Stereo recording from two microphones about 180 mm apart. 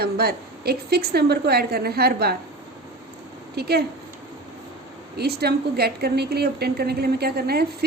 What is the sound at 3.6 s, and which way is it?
Speech, 60° right (ahead or behind).